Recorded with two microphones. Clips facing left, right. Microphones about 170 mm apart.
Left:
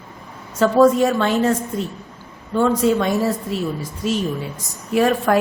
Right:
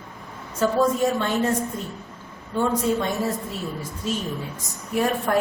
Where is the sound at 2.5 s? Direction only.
85° left.